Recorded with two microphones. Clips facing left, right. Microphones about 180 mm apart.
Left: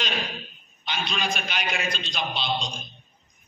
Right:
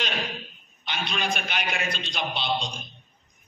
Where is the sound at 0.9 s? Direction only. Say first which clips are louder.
Even; 60° right (ahead or behind).